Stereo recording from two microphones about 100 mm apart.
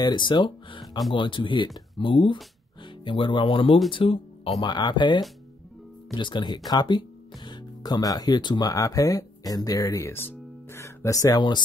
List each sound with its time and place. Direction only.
0.0 s speech: 50° left (ahead or behind)
4.6 s speech: 45° left (ahead or behind)